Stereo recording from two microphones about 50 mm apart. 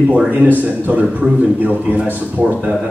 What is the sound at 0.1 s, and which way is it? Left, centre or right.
A man's voice, right.